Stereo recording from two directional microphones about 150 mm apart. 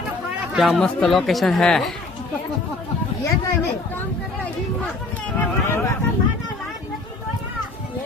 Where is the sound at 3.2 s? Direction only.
15° left (ahead or behind).